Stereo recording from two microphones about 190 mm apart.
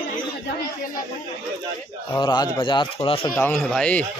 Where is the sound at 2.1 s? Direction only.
20° left (ahead or behind).